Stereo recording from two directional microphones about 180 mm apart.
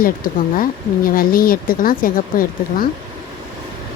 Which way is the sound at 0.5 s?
50° left (ahead or behind).